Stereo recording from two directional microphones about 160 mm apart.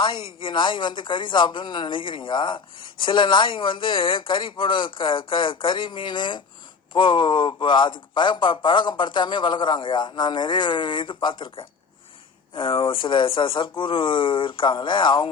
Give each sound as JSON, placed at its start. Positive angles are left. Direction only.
{"t": 0.3, "sound": "a man's voice", "side_deg": 30}